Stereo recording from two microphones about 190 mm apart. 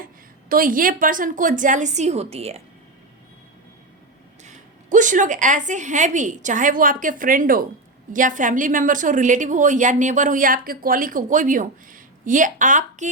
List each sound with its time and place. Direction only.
0.0 s a woman's voice: 45° right (ahead or behind)
4.4 s a woman's voice: 40° right (ahead or behind)